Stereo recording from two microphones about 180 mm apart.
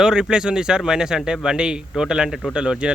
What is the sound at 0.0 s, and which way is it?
Speech, 5° right (ahead or behind).